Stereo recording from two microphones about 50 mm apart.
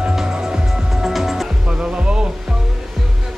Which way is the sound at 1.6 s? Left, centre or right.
Centre.